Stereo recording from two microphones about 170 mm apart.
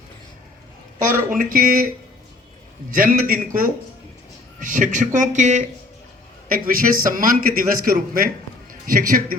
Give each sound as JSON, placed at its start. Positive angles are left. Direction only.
{"t": 1.3, "sound": "a man's voice", "side_deg": -55}
{"t": 2.9, "sound": "a man's voice", "side_deg": -50}